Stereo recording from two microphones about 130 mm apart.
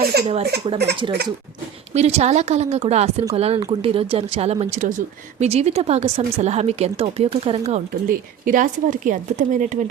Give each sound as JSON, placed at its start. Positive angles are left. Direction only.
{"t": 0.3, "sound": "speech", "side_deg": -45}
{"t": 1.9, "sound": "speech", "side_deg": -55}
{"t": 4.7, "sound": "speech", "side_deg": -80}
{"t": 5.5, "sound": "speech", "side_deg": -55}
{"t": 8.0, "sound": "speech", "side_deg": -90}